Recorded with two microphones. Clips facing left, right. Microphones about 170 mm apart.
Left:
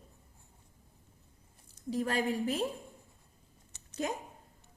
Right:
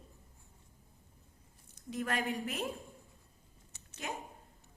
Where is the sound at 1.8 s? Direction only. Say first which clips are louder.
Left 4 dB; 30° left (ahead or behind).